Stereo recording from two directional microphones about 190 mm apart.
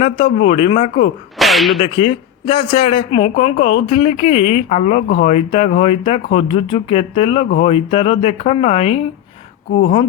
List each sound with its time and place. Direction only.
0.0 s speech: 30° left (ahead or behind)
1.4 s whip: centre (ahead or behind)
1.8 s speech: 30° left (ahead or behind)